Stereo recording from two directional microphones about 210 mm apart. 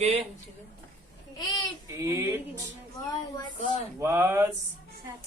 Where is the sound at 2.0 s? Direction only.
15° right (ahead or behind).